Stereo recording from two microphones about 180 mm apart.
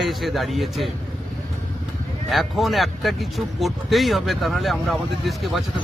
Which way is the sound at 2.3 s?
Centre (ahead or behind).